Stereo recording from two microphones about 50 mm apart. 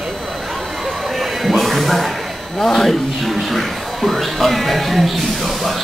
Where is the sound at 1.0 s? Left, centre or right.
Centre.